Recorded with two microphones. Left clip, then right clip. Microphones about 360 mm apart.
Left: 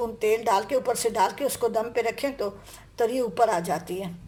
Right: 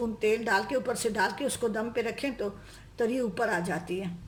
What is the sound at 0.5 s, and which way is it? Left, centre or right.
A woman's voice, centre.